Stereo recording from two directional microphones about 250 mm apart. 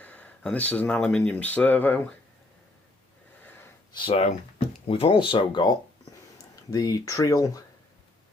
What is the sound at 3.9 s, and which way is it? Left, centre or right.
Speech, left.